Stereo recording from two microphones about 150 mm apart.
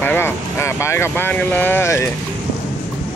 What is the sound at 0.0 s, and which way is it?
Speech, 15° left (ahead or behind).